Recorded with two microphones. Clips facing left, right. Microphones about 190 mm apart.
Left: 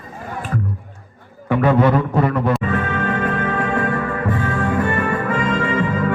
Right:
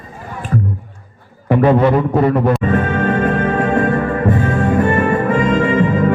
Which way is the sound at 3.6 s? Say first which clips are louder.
Right 5 dB; 40° right (ahead or behind).